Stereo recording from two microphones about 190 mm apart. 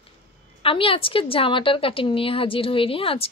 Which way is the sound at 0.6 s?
30° left (ahead or behind).